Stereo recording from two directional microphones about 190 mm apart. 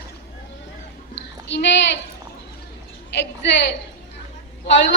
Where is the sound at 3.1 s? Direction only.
65° left (ahead or behind).